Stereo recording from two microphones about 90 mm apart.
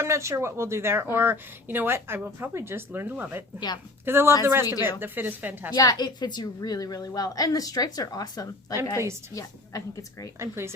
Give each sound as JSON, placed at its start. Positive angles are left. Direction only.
{"t": 0.0, "sound": "speech", "side_deg": -30}
{"t": 3.6, "sound": "a woman's voice", "side_deg": 50}
{"t": 4.0, "sound": "speech", "side_deg": -25}
{"t": 5.7, "sound": "a woman's voice", "side_deg": 45}
{"t": 10.3, "sound": "speech", "side_deg": -30}